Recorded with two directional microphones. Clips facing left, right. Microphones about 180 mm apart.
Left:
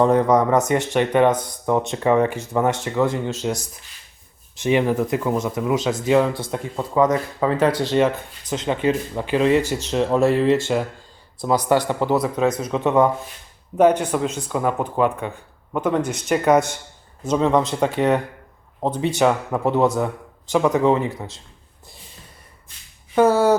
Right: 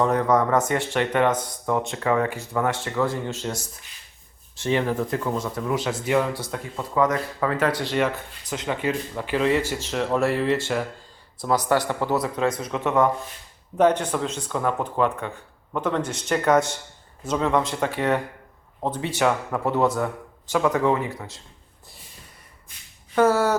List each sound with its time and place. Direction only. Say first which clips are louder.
0.0 s speech: left 4 dB; 25° left (ahead or behind)
23.1 s speech: left 3 dB; 15° left (ahead or behind)